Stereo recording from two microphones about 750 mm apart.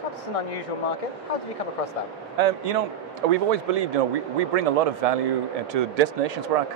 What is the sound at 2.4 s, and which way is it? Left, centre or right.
A man's voice, right.